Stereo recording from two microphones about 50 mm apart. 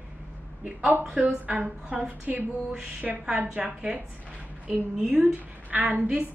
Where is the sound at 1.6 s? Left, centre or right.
Centre.